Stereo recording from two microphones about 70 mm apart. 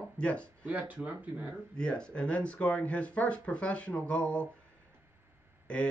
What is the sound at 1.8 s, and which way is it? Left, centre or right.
Speech, centre.